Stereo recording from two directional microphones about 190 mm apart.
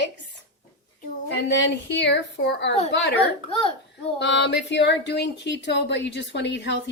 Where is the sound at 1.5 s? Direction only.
70° left (ahead or behind).